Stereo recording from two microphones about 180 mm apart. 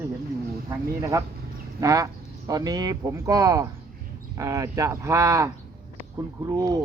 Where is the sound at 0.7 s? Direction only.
15° right (ahead or behind).